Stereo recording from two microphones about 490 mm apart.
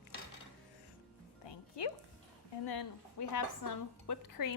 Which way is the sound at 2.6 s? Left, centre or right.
Left.